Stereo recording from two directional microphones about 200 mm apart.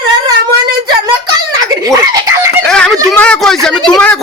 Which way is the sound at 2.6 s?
5° left (ahead or behind).